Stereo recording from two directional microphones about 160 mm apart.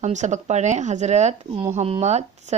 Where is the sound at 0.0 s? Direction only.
45° right (ahead or behind).